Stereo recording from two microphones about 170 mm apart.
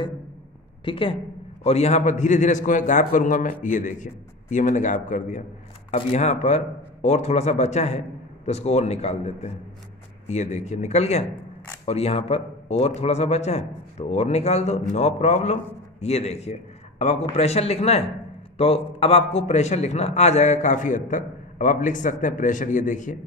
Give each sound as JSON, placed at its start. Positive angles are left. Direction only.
{"t": 0.8, "sound": "a man's voice", "side_deg": 30}